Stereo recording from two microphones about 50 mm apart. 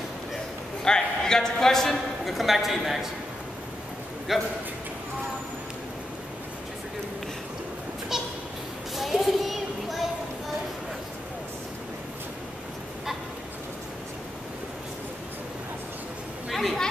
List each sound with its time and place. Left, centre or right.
0.8 s a man's voice: centre
4.3 s a man's voice: centre
8.1 s a sound: centre
16.5 s chatter: centre